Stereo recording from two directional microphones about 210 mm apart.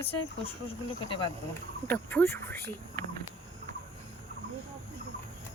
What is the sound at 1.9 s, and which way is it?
Speech, 10° left (ahead or behind).